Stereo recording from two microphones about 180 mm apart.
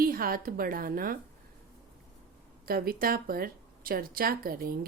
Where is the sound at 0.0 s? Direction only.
55° right (ahead or behind).